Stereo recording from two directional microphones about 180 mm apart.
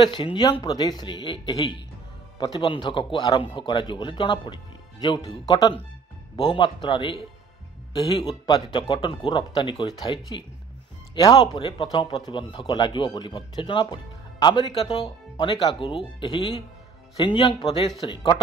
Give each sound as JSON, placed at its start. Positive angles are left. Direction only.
{"t": 0.1, "sound": "a man's voice", "side_deg": 25}
{"t": 11.1, "sound": "a man's voice", "side_deg": 20}